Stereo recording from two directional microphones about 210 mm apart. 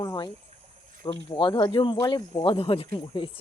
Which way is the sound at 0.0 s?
20° left (ahead or behind).